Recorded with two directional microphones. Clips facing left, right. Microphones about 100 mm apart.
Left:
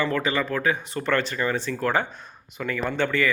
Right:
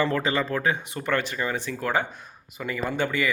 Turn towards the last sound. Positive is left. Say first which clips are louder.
# left 2 dB
turn(degrees=-15)  # may be behind; listen again after turning